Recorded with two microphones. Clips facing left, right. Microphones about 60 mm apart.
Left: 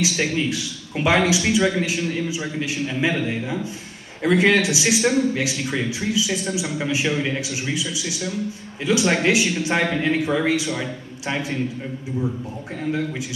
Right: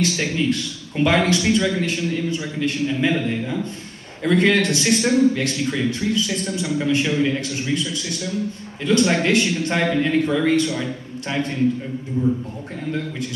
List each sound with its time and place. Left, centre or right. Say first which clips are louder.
0.0 s a man's voice: right 1 dB; centre
1.6 s a man's voice: left 1 dB; centre